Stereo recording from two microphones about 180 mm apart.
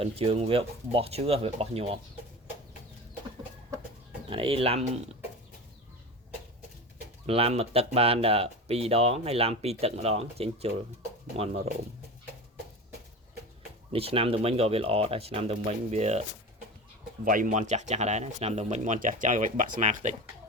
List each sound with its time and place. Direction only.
0.0 s speech: 35° right (ahead or behind)
4.3 s speech: 30° right (ahead or behind)
7.3 s speech: 35° right (ahead or behind)
13.9 s speech: 30° right (ahead or behind)
17.2 s speech: 50° right (ahead or behind)